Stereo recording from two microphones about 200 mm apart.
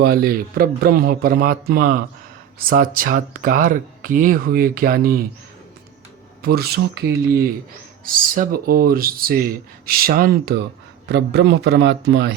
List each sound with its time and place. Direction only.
0.0 s speech: 50° right (ahead or behind)
6.4 s a man's voice: 50° right (ahead or behind)